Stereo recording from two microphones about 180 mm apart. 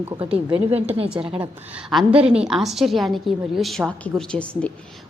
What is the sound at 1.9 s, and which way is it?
A woman's voice, centre (ahead or behind).